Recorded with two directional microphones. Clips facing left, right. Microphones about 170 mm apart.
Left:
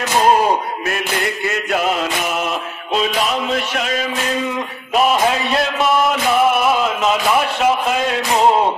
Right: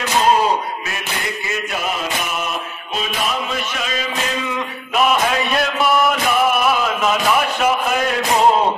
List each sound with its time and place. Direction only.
0.8 s chant: 65° left (ahead or behind)
2.3 s music: 90° left
3.5 s chant: 60° left (ahead or behind)
5.5 s a man's voice: 25° left (ahead or behind)
6.7 s a sound: 20° left (ahead or behind)